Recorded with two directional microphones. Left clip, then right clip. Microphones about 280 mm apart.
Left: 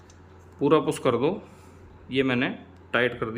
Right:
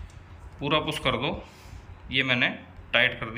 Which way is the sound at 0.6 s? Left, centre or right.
Centre.